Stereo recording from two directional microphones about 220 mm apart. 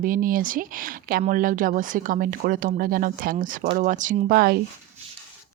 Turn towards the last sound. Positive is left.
turn(degrees=-40)  # may be behind; listen again after turning